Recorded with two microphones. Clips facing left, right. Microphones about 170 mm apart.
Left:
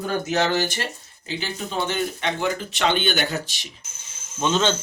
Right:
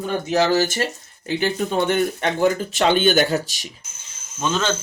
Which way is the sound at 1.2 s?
55° right (ahead or behind).